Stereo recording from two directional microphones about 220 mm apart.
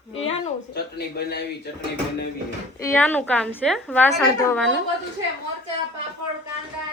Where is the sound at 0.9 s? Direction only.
45° left (ahead or behind).